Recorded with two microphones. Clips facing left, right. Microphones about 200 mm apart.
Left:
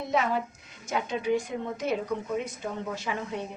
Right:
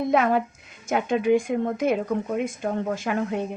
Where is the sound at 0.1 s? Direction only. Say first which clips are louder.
Right 4 dB; 60° right (ahead or behind).